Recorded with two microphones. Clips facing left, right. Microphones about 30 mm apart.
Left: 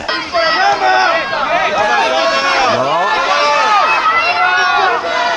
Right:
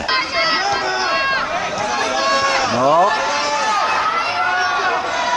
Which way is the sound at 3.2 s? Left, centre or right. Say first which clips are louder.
Left 7 dB; left.